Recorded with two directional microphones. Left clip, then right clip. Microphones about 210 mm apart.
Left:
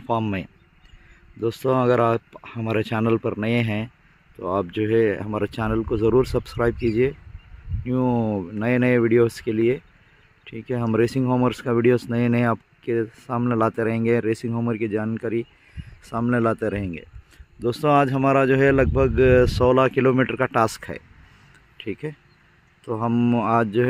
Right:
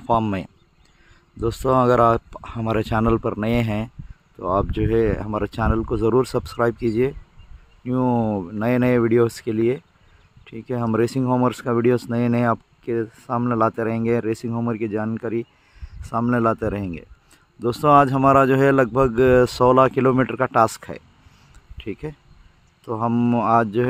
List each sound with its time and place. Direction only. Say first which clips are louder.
0.0 s speech: right 4 dB; 10° right (ahead or behind)